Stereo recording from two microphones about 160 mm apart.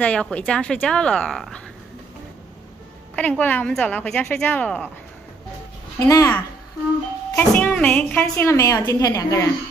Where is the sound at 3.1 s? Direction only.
10° left (ahead or behind).